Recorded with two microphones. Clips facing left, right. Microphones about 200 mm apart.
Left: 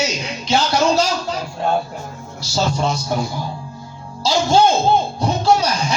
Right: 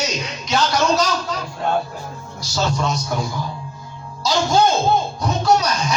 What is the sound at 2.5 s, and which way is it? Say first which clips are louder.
Speech: left 2 dB; 30° left (ahead or behind).